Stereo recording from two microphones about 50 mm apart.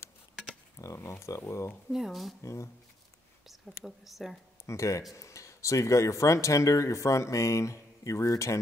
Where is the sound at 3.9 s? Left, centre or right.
Centre.